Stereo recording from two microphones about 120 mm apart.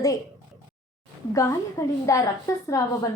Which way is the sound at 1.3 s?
25° left (ahead or behind).